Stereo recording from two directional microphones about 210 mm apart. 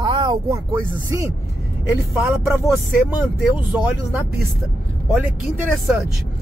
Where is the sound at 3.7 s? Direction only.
5° right (ahead or behind).